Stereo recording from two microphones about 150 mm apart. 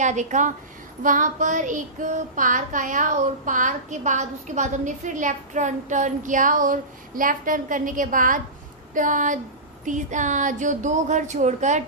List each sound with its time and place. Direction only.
0.0 s speech: 55° right (ahead or behind)
1.0 s child singing: 60° right (ahead or behind)